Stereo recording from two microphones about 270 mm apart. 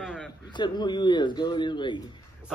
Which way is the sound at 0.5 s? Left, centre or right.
Centre.